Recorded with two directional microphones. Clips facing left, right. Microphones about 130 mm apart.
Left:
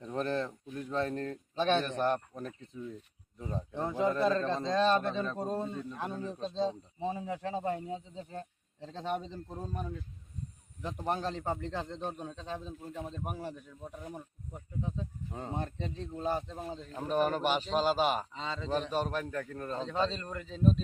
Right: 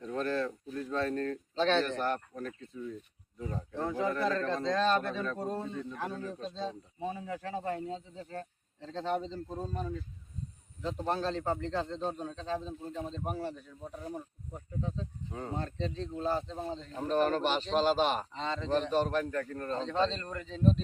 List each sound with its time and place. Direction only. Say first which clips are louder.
0.0 s a man's voice: right 1 dB; 20° left (ahead or behind)
11.0 s speech: right 1 dB; 15° left (ahead or behind)
14.8 s speech: even; 15° left (ahead or behind)